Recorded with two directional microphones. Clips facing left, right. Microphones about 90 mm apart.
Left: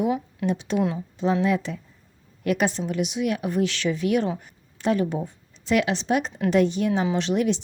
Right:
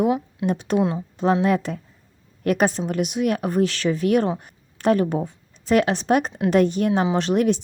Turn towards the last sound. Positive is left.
turn(degrees=-50)  # may be behind; listen again after turning